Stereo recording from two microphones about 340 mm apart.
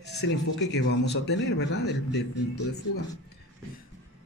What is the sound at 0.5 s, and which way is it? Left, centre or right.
A man's voice, left.